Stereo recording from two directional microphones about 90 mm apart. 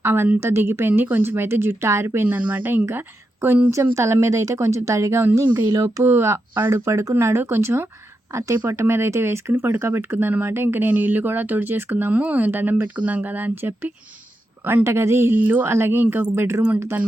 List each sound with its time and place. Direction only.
0.0 s speech: 25° right (ahead or behind)
2.2 s speech: 20° right (ahead or behind)
3.7 s speech: 35° right (ahead or behind)